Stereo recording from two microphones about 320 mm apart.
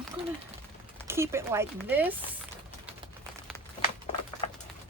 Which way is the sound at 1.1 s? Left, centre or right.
Centre.